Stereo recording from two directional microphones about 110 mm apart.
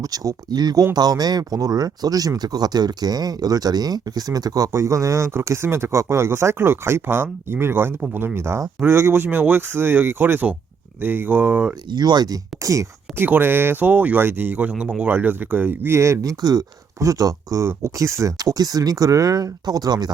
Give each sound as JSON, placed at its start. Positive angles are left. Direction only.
{"t": 0.0, "sound": "speech", "side_deg": -35}
{"t": 11.9, "sound": "speech", "side_deg": -40}
{"t": 13.2, "sound": "speech", "side_deg": -20}